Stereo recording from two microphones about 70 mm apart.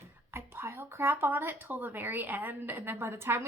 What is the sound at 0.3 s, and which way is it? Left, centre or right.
Speech, right.